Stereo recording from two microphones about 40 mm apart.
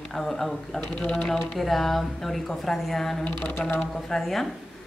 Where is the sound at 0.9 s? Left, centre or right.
Left.